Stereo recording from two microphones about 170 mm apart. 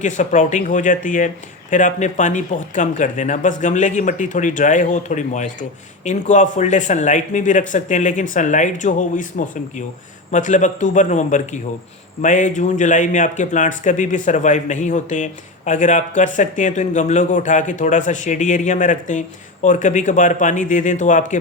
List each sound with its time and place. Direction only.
0.0 s speech: 45° left (ahead or behind)